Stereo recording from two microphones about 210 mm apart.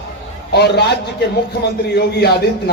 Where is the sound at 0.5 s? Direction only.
50° left (ahead or behind).